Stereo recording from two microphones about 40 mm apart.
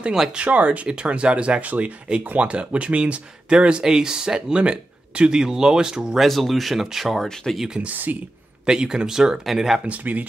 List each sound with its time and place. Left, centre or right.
0.4 s speech: right
1.6 s speech: right
2.0 s speech: right
4.6 s speech: right
5.3 s speech: centre
6.1 s speech: centre
7.8 s speech: right
8.6 s speech: centre
9.8 s speech: right